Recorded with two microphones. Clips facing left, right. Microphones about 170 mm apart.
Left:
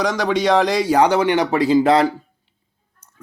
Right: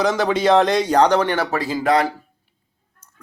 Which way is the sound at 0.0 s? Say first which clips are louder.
Right 1 dB; centre (ahead or behind).